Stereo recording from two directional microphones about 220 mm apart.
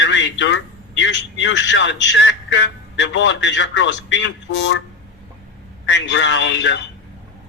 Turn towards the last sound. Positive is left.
turn(degrees=55)  # may be behind; listen again after turning